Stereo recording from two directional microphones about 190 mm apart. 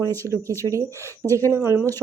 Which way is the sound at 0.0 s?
15° right (ahead or behind).